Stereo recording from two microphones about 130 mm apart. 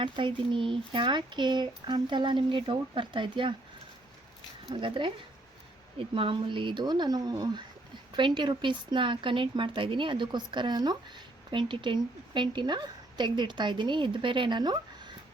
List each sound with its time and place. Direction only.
0.0 s a woman's voice: 40° right (ahead or behind)
4.7 s a woman's voice: 40° right (ahead or behind)